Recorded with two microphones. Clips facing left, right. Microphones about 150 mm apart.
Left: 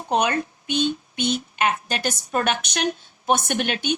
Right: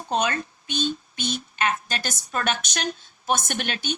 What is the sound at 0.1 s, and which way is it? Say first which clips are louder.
Speech: left 3 dB; 15° left (ahead or behind).